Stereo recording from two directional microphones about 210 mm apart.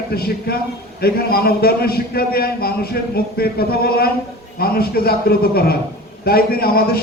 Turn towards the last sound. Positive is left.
turn(degrees=45)  # may be behind; listen again after turning